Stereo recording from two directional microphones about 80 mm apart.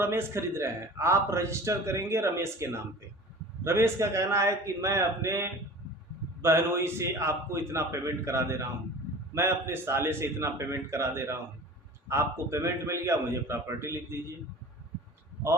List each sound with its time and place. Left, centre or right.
0.0 s a man's voice: right